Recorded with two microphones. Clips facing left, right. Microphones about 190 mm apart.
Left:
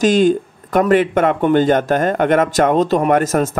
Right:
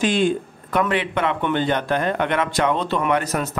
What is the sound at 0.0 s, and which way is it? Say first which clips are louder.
Speech: left 7 dB; 40° left (ahead or behind).